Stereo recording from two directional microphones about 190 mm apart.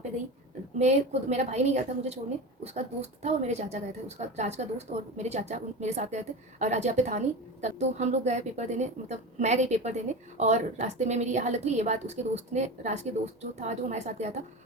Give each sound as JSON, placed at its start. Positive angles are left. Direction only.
{"t": 0.8, "sound": "a woman's voice", "side_deg": -35}